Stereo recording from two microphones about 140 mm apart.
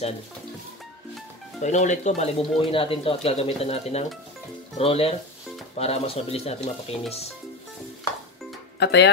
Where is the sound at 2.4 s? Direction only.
40° left (ahead or behind).